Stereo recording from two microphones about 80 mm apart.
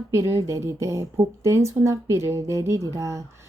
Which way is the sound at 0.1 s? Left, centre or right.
Right.